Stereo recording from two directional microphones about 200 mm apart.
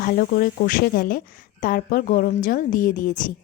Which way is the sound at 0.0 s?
45° left (ahead or behind).